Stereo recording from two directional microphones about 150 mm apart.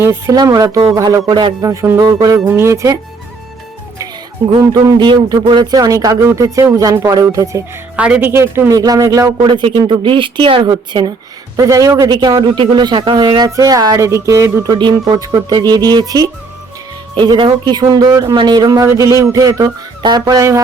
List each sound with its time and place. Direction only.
0.0 s a man's voice: 15° right (ahead or behind)
4.6 s a man's voice: 25° right (ahead or behind)
7.9 s a man's voice: 10° right (ahead or behind)